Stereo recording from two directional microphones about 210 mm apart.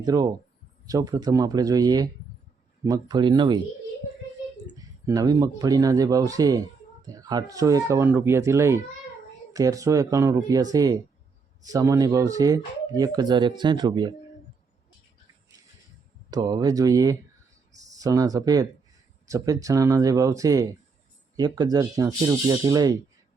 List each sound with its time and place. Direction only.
0.0 s speech: 15° right (ahead or behind)
4.7 s speech: 15° right (ahead or behind)
16.3 s speech: 20° right (ahead or behind)